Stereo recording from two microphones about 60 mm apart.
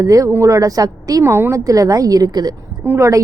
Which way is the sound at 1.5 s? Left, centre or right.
Right.